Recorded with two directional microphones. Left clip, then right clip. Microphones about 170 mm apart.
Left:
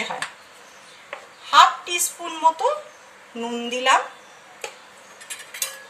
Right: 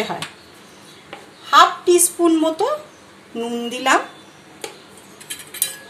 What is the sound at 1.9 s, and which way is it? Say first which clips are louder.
Speech: right 12 dB; 40° right (ahead or behind).